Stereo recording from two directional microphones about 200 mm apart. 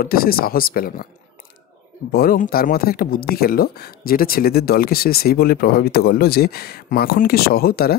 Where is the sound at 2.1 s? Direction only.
45° left (ahead or behind).